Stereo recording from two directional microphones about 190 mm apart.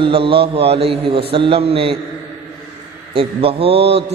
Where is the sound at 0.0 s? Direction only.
30° right (ahead or behind).